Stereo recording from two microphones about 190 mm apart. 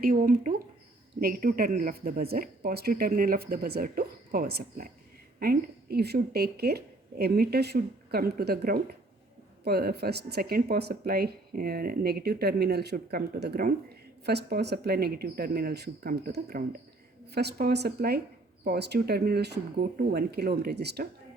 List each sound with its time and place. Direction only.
0.0 s speech: 50° right (ahead or behind)